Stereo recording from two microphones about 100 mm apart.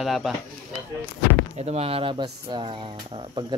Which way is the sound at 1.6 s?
85° right.